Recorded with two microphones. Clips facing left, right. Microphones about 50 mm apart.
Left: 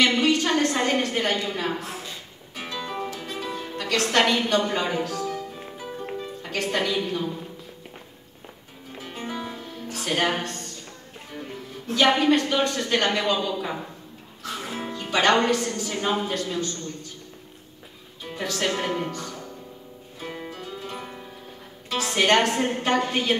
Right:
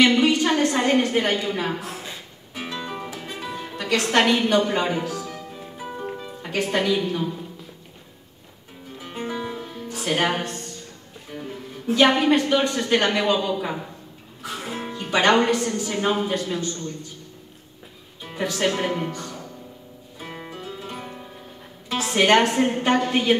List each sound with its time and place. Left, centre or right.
0.0 s a sound: centre
2.5 s music: centre
6.1 s speech: centre
9.3 s music: centre
9.9 s a woman's voice: centre
18.2 s speech: centre
20.2 s music: centre
21.8 s a woman's voice: centre